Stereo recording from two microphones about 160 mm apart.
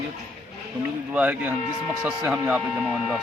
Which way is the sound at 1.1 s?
10° right (ahead or behind).